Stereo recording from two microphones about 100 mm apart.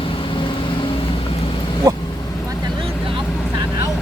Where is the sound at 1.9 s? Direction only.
35° right (ahead or behind).